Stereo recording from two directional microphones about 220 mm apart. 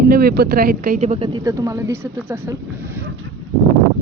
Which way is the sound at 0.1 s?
45° right (ahead or behind).